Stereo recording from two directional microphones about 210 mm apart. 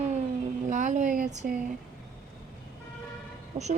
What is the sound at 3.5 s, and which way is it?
Speech, 40° right (ahead or behind).